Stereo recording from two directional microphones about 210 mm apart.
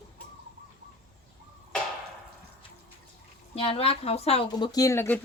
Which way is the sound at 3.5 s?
25° left (ahead or behind).